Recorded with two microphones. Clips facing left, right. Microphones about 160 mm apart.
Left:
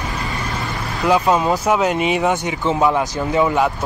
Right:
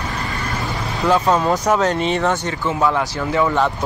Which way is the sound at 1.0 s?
10° left (ahead or behind).